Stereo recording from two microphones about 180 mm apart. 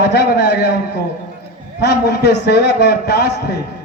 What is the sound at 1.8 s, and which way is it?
A man's voice, 65° left (ahead or behind).